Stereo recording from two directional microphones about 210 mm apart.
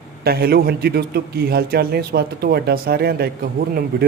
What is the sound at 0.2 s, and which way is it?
Speech, 50° right (ahead or behind).